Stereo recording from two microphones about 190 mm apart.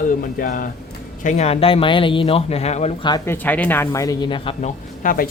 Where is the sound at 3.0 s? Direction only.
15° left (ahead or behind); by 5.2 s 45° left (ahead or behind).